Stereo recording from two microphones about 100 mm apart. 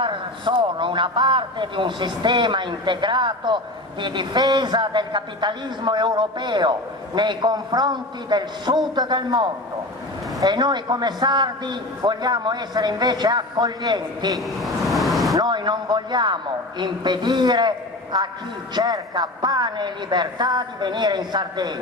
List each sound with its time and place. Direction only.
0.0 s a man's voice: 55° right (ahead or behind)
14.3 s vehicle: centre (ahead or behind)
15.4 s a man's voice: 50° right (ahead or behind)